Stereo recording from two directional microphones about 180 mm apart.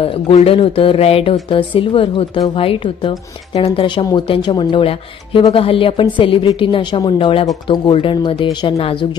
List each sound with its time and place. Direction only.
0.0 s a woman's voice: 35° left (ahead or behind)